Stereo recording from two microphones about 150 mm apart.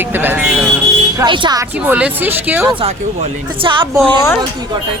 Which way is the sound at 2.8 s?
40° right (ahead or behind).